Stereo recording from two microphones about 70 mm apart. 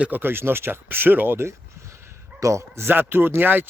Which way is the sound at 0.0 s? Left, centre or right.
Right.